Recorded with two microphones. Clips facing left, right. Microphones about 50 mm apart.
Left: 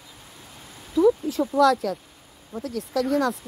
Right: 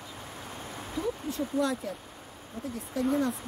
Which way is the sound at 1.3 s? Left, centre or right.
Left.